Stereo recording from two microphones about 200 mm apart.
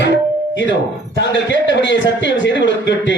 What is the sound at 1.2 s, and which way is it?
A man's voice, 60° left (ahead or behind).